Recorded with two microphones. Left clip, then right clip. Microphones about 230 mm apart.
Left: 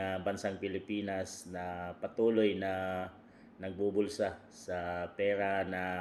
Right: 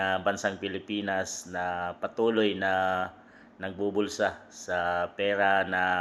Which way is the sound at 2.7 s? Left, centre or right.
Right.